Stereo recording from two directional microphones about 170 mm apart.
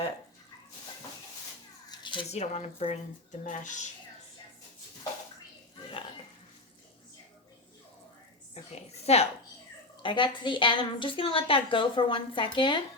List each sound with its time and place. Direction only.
1.9 s a woman's voice: 25° left (ahead or behind); by 3.8 s 45° left (ahead or behind)
8.5 s a woman's voice: 40° left (ahead or behind)